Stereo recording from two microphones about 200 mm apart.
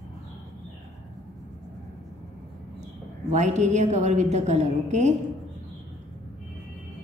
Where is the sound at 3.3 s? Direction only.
35° right (ahead or behind).